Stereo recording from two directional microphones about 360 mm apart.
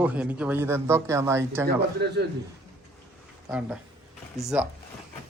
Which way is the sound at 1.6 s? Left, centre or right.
Right.